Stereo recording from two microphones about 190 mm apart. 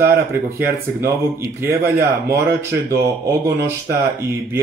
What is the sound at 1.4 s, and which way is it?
Speech, 10° right (ahead or behind).